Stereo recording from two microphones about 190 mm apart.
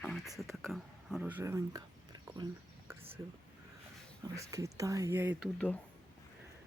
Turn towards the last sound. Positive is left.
turn(degrees=5)  # may be behind; listen again after turning